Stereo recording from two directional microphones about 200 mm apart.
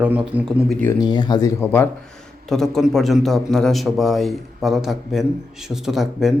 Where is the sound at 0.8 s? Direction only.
20° left (ahead or behind); by 6.3 s centre (ahead or behind).